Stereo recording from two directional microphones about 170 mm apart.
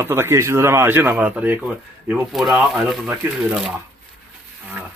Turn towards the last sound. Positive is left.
turn(degrees=-10)  # may be behind; listen again after turning